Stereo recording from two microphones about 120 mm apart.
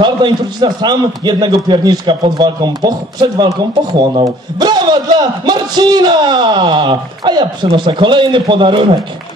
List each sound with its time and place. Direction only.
0.0 s a man's voice: 40° right (ahead or behind)